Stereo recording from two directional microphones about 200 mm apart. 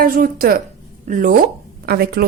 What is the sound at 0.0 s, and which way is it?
A woman's voice, 50° right (ahead or behind).